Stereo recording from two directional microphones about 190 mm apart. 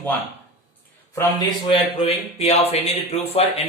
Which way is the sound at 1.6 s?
30° left (ahead or behind).